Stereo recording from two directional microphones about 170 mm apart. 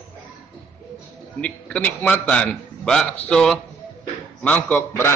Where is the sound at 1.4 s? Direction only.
10° left (ahead or behind).